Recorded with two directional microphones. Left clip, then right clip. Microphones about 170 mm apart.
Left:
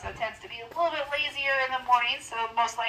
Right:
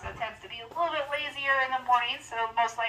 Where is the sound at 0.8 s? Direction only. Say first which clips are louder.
Left 2 dB; 45° left (ahead or behind).